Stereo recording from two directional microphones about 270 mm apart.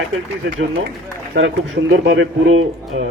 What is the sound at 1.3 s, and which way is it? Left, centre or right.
A man's voice, right.